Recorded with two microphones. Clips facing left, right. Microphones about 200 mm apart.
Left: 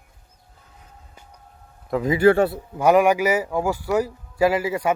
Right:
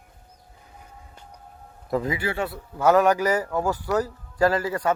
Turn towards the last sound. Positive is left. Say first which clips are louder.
# left 2 dB
turn(degrees=10)  # may be behind; listen again after turning